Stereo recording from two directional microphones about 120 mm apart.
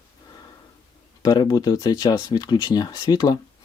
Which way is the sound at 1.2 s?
35° left (ahead or behind).